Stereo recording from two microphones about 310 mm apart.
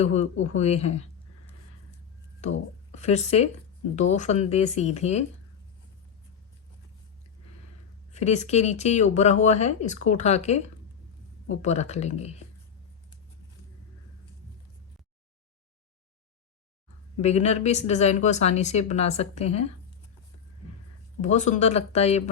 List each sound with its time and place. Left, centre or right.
0.0 s speech: left
2.9 s speech: left
8.1 s speech: left
11.6 s speech: left
17.2 s speech: left
21.2 s speech: left